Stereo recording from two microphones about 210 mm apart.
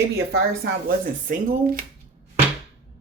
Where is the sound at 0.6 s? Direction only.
50° right (ahead or behind).